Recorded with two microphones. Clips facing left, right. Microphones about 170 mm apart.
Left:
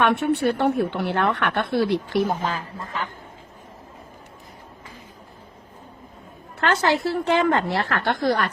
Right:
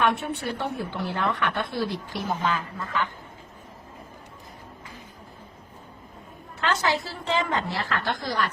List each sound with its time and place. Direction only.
0.0 s a woman's voice: 65° left (ahead or behind)
2.4 s speech: 35° left (ahead or behind)
6.6 s a woman's voice: 65° left (ahead or behind)